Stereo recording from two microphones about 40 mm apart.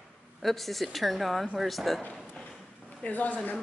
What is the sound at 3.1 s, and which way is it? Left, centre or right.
Speech, left.